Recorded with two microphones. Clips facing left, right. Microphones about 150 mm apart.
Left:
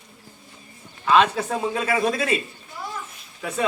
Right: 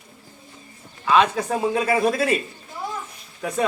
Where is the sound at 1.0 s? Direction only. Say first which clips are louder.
Even; 10° right (ahead or behind).